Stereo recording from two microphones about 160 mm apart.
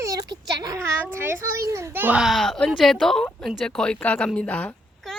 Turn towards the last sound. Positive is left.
turn(degrees=10)  # may be behind; listen again after turning